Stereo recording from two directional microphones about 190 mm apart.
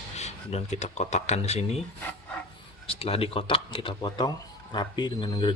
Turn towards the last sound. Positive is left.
turn(degrees=25)  # may be behind; listen again after turning